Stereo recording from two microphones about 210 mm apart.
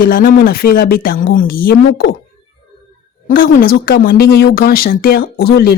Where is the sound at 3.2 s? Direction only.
40° left (ahead or behind).